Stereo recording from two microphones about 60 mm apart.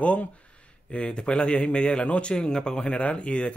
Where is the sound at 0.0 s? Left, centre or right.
Left.